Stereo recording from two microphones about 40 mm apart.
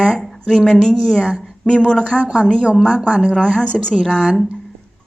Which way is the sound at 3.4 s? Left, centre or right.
Left.